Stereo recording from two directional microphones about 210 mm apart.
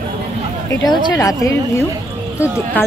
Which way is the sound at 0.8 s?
15° left (ahead or behind).